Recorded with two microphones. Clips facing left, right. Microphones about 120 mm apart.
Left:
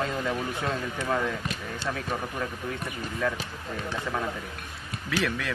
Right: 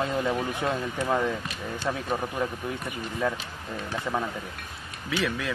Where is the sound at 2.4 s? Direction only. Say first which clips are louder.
Right 4 dB; 25° right (ahead or behind).